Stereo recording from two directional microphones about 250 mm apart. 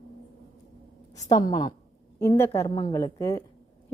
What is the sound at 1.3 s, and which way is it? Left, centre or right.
A woman's voice, centre.